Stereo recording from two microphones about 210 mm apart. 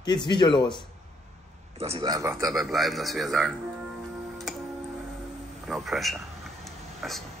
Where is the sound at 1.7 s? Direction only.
30° right (ahead or behind).